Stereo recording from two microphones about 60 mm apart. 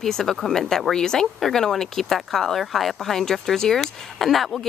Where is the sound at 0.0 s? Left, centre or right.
Centre.